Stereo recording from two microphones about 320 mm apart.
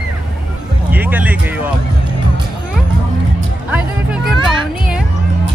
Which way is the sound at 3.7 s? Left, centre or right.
Centre.